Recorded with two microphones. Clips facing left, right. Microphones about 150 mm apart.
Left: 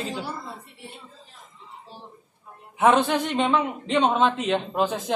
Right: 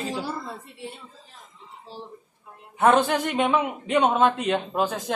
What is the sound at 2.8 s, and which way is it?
A man's voice, centre (ahead or behind).